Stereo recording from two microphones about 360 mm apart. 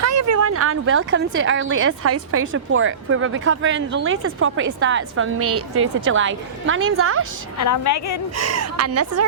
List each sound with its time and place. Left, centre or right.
0.0 s speech: right
7.6 s a woman's voice: left
8.4 s a woman's voice: right